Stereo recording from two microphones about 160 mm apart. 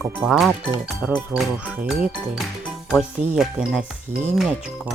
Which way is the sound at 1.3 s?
Centre (ahead or behind).